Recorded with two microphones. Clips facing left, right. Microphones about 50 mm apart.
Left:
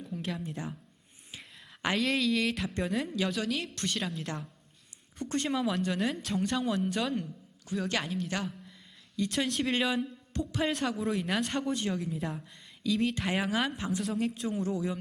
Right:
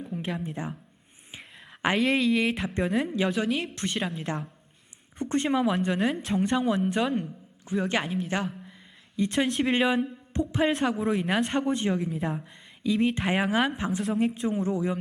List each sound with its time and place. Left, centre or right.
0.1 s a woman's voice: right
8.0 s a woman's voice: centre
9.1 s a woman's voice: right
11.0 s a woman's voice: centre
11.4 s a woman's voice: right
12.1 s a woman's voice: centre
12.4 s a woman's voice: right